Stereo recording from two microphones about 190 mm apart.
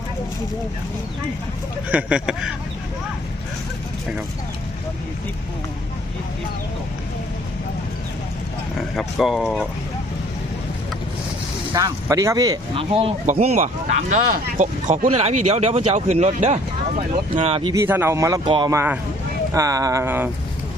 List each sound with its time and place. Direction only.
1.9 s speech: 5° right (ahead or behind)
9.0 s speech: centre (ahead or behind)
11.7 s speech: 20° right (ahead or behind)
12.9 s speech: 30° right (ahead or behind)
17.8 s speech: 10° right (ahead or behind)